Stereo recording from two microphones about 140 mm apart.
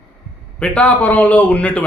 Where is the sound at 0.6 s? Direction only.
10° left (ahead or behind).